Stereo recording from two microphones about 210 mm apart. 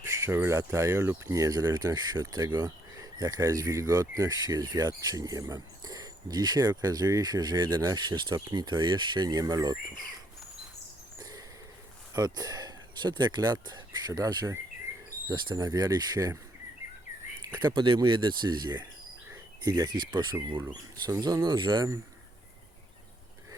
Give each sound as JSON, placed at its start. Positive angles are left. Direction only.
{"t": 0.0, "sound": "speech", "side_deg": -15}
{"t": 11.2, "sound": "mouse", "side_deg": -15}
{"t": 12.1, "sound": "speech", "side_deg": -15}
{"t": 17.4, "sound": "speech", "side_deg": -20}